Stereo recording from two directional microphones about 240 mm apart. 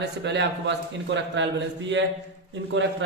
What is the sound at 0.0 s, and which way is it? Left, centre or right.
A man's voice, right.